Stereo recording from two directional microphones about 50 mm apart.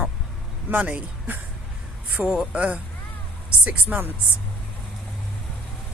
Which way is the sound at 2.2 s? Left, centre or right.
Right.